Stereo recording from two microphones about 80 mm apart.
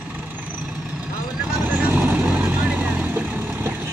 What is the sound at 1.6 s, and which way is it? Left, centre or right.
Vehicle, right.